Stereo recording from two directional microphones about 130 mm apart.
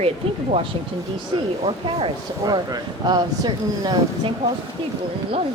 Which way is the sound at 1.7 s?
45° right (ahead or behind).